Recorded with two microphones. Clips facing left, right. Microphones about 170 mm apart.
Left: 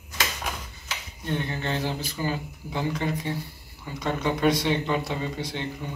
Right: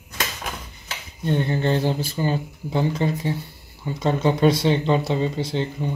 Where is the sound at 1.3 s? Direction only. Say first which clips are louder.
Right 7 dB; 30° right (ahead or behind).